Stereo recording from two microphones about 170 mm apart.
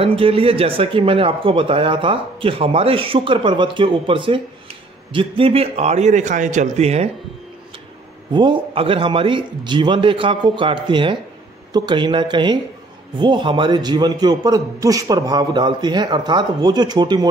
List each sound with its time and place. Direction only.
0.0 s speech: 35° right (ahead or behind)
8.3 s a man's voice: 30° right (ahead or behind)